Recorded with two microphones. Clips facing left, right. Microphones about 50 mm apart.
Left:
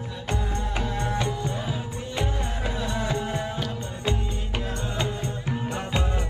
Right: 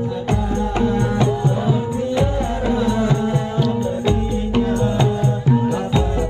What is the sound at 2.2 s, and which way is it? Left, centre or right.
Music, centre.